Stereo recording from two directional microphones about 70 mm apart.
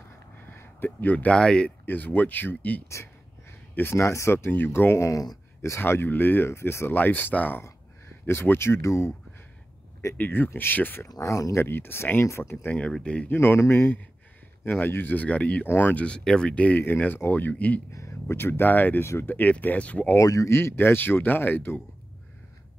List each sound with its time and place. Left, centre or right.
0.4 s speech: left; by 1.7 s centre
1.9 s speech: left
3.7 s speech: left
10.1 s speech: left
11.1 s speech: left
11.6 s speech: left
12.9 s speech: centre
13.3 s speech: left
15.6 s speech: left
16.0 s speech: centre
16.8 s speech: left
18.3 s speech: left
20.2 s speech: left
20.5 s speech: left